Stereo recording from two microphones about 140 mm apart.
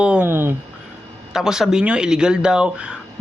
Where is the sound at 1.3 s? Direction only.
5° right (ahead or behind).